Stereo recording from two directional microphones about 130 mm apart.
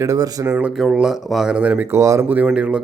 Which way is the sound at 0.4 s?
10° right (ahead or behind).